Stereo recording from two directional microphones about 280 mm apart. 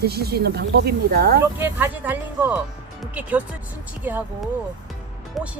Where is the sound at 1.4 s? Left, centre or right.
Centre.